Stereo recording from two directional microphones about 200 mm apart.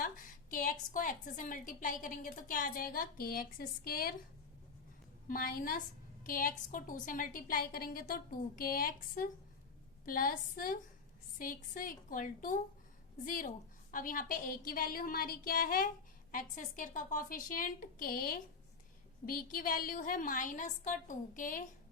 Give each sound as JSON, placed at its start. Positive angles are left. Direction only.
{"t": 0.0, "sound": "a woman's voice", "side_deg": 45}
{"t": 5.3, "sound": "a woman's voice", "side_deg": 45}